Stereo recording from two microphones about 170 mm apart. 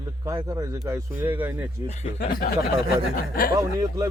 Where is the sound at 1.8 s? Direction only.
55° left (ahead or behind).